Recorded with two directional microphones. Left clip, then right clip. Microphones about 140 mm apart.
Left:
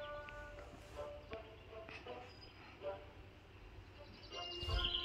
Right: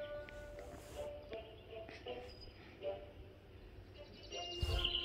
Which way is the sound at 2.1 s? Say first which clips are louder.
Right 5 dB; 10° right (ahead or behind).